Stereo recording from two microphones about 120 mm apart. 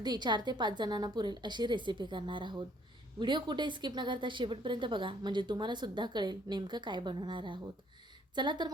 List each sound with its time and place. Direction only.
0.0 s speech: 35° right (ahead or behind)